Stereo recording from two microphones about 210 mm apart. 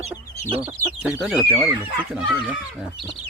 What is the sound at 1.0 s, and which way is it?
Speech, 5° right (ahead or behind).